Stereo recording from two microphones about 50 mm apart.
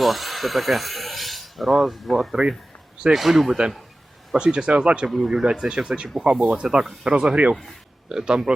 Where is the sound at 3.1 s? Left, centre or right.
Centre.